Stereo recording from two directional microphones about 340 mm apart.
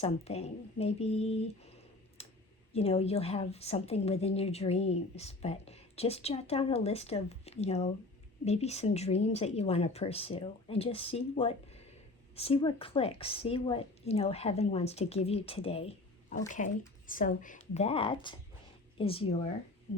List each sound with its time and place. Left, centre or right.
0.0 s a woman's voice: centre
2.2 s a sound: centre
2.7 s a woman's voice: centre